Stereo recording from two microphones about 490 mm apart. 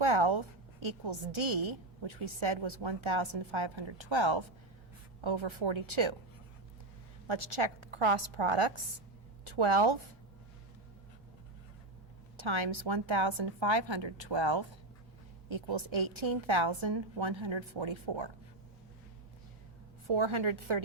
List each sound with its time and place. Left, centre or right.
0.0 s a woman's voice: right
7.3 s a woman's voice: right
9.4 s a woman's voice: right
12.4 s a woman's voice: right
20.1 s a woman's voice: right